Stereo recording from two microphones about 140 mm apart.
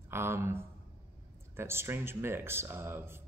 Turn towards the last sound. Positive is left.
turn(degrees=-15)  # may be behind; listen again after turning